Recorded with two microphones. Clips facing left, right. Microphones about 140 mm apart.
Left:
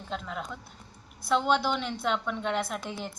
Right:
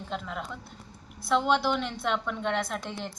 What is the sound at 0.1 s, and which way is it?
A woman's voice, centre (ahead or behind).